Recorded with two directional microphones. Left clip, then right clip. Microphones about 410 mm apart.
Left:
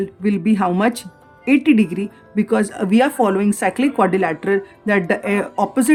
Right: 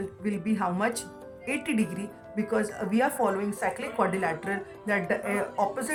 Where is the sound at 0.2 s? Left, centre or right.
Centre.